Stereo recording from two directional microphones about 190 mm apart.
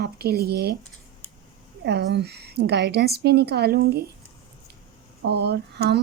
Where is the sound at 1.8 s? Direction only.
65° right (ahead or behind).